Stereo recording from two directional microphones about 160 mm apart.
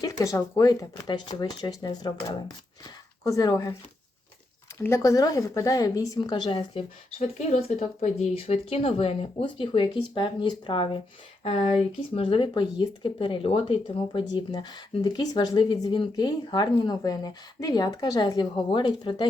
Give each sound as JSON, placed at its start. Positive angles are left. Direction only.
{"t": 0.0, "sound": "speech", "side_deg": 20}
{"t": 3.2, "sound": "speech", "side_deg": 25}
{"t": 4.8, "sound": "speech", "side_deg": 20}
{"t": 7.3, "sound": "speech", "side_deg": 50}
{"t": 11.4, "sound": "speech", "side_deg": 45}